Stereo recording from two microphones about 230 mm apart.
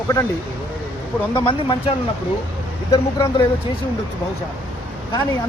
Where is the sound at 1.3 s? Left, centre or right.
Left.